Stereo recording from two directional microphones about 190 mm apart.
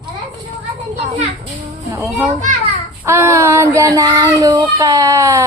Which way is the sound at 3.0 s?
15° right (ahead or behind).